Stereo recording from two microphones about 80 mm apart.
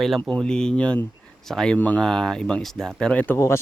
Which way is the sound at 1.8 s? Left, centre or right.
Centre.